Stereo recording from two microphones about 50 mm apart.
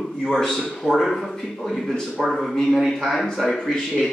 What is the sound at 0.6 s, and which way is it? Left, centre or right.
Speech, centre.